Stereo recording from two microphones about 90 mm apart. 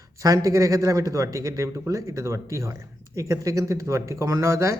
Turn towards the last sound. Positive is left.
turn(degrees=-35)  # may be behind; listen again after turning